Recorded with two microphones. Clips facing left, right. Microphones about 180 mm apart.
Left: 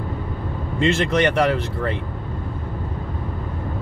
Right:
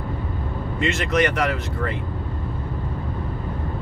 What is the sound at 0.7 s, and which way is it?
A man's voice, 30° left (ahead or behind).